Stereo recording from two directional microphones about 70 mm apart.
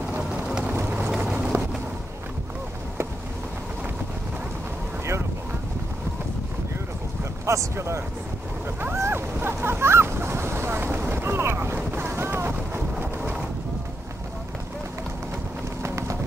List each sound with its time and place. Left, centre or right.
1.1 s a sound: centre
7.4 s speech: right
8.8 s boat: right
15.8 s vehicle: right